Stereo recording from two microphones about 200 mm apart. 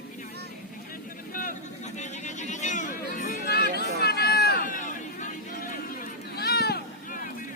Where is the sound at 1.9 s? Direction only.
35° left (ahead or behind).